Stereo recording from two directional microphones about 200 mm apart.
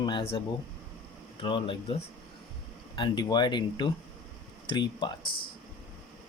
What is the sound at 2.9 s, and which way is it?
Speech, 20° left (ahead or behind).